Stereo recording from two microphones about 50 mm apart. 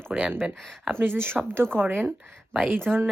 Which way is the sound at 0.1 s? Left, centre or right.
Centre.